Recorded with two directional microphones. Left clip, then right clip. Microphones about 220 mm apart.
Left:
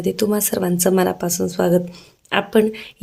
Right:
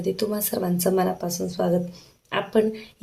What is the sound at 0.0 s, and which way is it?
Speech, 35° left (ahead or behind).